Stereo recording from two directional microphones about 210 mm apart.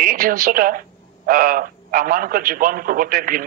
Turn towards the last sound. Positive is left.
turn(degrees=-40)  # may be behind; listen again after turning